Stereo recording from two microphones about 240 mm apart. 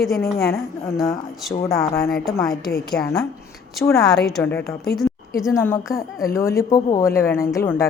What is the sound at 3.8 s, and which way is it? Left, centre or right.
A woman's voice, centre.